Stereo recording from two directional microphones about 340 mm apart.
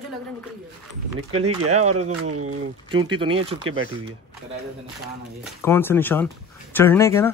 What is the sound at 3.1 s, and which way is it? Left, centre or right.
Speech, centre.